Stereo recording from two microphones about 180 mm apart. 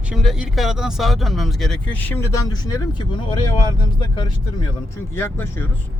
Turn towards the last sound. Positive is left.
turn(degrees=10)  # may be behind; listen again after turning